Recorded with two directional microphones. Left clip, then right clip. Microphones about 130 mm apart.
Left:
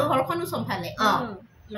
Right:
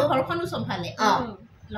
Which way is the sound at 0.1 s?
25° left (ahead or behind).